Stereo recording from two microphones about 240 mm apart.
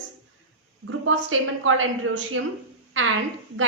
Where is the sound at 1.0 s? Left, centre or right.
Right.